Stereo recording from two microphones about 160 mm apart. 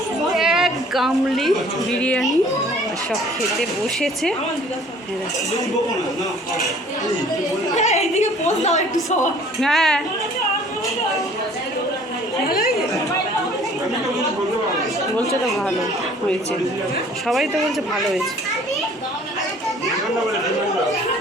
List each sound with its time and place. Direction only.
0.3 s a woman's voice: centre (ahead or behind)
3.6 s speech: centre (ahead or behind)
7.8 s a woman's voice: 45° left (ahead or behind)
9.6 s speech: centre (ahead or behind)
12.5 s speech: 70° left (ahead or behind)
15.2 s speech: centre (ahead or behind)
17.2 s speech: centre (ahead or behind)